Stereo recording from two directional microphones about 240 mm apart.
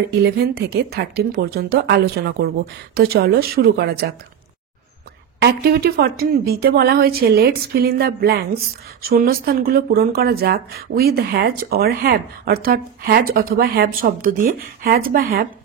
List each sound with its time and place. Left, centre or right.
0.1 s speech: right
5.4 s speech: right